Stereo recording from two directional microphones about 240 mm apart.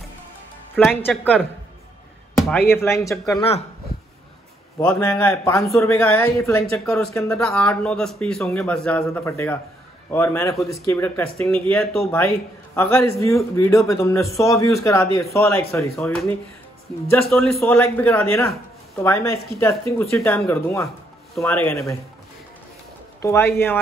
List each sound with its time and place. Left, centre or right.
0.7 s speech: centre
2.4 s speech: centre
3.3 s speech: left
4.7 s speech: centre
23.2 s speech: centre